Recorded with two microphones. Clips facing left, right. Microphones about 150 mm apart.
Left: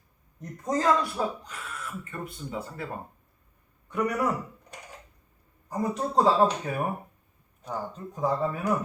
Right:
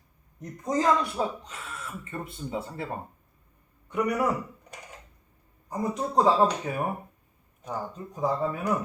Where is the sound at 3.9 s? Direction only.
15° right (ahead or behind).